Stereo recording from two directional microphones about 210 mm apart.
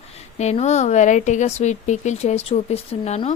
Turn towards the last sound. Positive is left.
turn(degrees=30)  # may be behind; listen again after turning